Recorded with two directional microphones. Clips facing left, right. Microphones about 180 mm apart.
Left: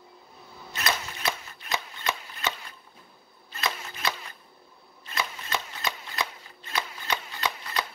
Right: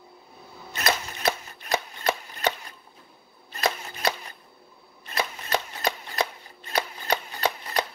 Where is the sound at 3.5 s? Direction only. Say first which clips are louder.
Right 5 dB; 40° right (ahead or behind).